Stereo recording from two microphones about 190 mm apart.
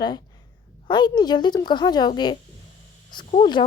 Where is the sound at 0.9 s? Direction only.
25° left (ahead or behind).